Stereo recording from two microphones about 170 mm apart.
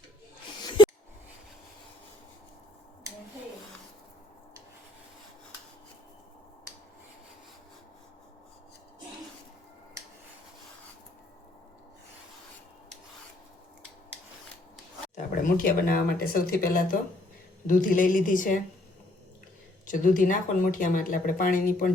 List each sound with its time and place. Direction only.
15.1 s speech: 55° left (ahead or behind)
19.9 s speech: 50° left (ahead or behind)